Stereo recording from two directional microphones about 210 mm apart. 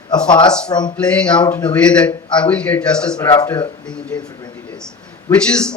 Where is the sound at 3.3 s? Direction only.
20° left (ahead or behind).